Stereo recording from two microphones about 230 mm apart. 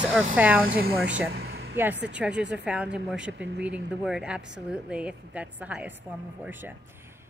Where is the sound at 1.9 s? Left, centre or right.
Right.